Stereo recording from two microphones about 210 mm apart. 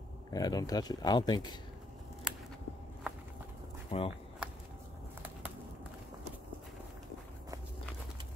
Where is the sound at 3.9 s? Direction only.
25° left (ahead or behind).